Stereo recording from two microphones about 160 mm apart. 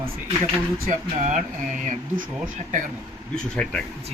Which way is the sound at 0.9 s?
50° right (ahead or behind).